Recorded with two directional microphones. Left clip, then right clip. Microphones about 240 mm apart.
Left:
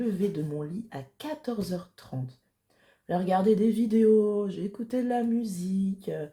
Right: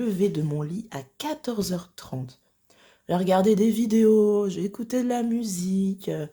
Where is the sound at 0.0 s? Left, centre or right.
Right.